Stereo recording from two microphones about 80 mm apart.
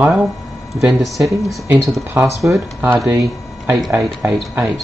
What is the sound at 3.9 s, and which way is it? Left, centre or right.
Speech, right.